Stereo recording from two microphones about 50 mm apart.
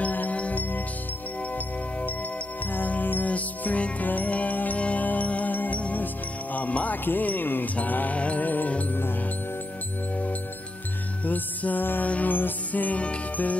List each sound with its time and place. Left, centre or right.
0.0 s music: left
7.1 s speech: left
7.7 s music: left
11.2 s music: left